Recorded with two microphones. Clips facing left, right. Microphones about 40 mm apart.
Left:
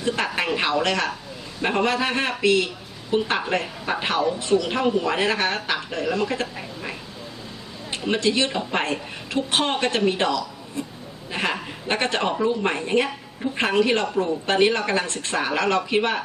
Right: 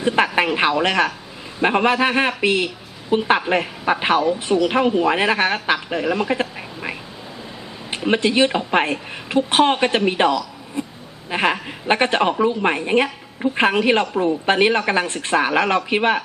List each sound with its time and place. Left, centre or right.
0.0 s a sound: right
1.6 s a woman's voice: right
7.9 s a woman's voice: right
10.8 s goat: right
11.3 s a woman's voice: right